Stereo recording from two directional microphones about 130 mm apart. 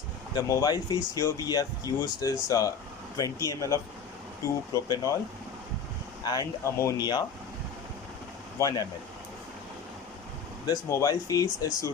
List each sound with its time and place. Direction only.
0.3 s speech: 25° left (ahead or behind)
6.2 s speech: 25° left (ahead or behind)
8.5 s speech: 25° left (ahead or behind)
10.7 s speech: 25° left (ahead or behind)